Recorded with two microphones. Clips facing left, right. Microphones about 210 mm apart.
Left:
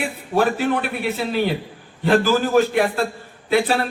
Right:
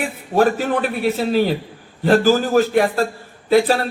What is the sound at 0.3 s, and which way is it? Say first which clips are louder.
A man's voice: right 2 dB; 40° right (ahead or behind).